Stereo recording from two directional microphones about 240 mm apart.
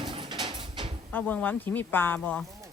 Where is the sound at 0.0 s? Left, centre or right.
Right.